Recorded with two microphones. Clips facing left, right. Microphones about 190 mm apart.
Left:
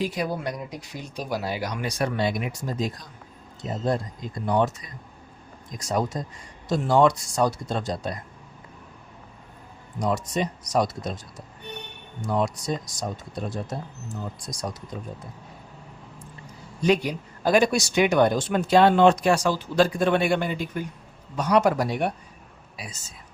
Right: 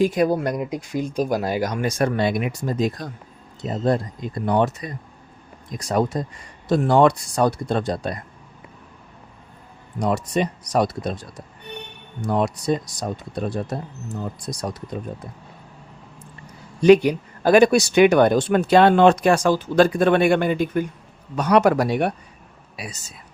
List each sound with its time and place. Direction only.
0.0 s speech: 50° right (ahead or behind)
10.0 s speech: 60° right (ahead or behind)
16.8 s speech: 65° right (ahead or behind)
21.3 s speech: 65° right (ahead or behind)